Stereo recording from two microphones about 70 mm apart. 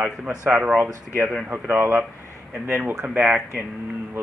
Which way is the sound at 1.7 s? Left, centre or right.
Right.